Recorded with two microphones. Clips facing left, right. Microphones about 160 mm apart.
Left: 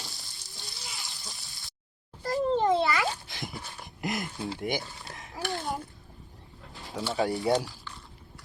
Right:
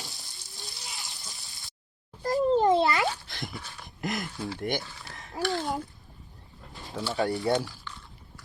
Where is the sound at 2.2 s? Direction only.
40° right (ahead or behind).